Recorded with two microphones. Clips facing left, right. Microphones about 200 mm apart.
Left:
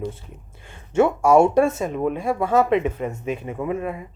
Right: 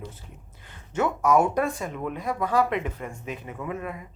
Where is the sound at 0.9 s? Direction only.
30° left (ahead or behind).